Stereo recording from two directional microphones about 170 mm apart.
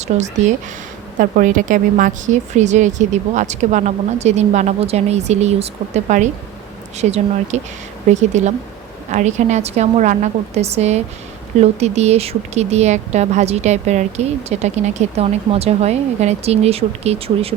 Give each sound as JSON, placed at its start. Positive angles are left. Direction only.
{"t": 0.1, "sound": "speech", "side_deg": -40}
{"t": 1.2, "sound": "a woman's voice", "side_deg": -50}